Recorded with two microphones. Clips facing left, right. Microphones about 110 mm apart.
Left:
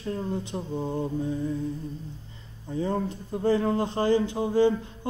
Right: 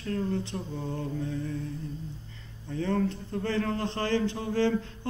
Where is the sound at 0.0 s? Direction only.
15° left (ahead or behind).